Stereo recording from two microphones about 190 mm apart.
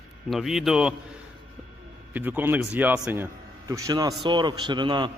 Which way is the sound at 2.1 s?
10° right (ahead or behind).